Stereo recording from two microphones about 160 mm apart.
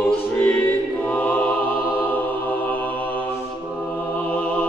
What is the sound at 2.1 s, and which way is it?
Music, 10° left (ahead or behind).